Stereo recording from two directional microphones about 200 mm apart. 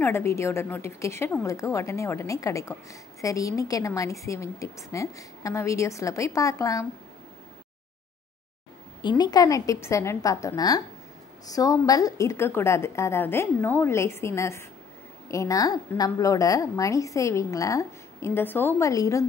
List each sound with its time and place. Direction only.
0.0 s a woman's voice: 10° left (ahead or behind)
9.0 s a woman's voice: 20° left (ahead or behind)